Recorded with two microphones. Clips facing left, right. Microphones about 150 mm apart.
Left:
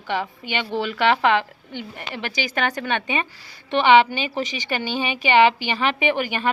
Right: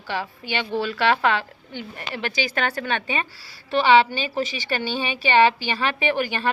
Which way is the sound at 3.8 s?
20° left (ahead or behind).